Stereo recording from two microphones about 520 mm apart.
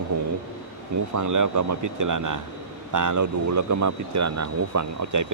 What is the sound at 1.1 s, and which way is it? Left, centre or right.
Speech, right.